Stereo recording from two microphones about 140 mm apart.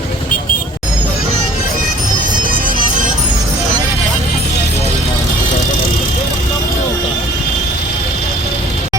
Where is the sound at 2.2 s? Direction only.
75° right (ahead or behind).